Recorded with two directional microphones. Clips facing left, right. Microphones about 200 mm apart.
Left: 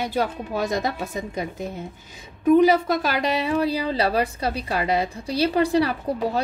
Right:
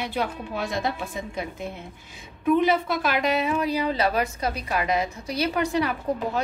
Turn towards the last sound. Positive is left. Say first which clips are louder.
# left 2 dB
turn(degrees=35)  # may be behind; listen again after turning